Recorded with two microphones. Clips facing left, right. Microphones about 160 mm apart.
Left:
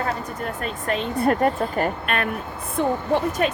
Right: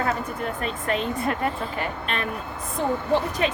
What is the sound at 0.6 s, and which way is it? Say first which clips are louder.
Speech: left 1 dB; 40° left (ahead or behind).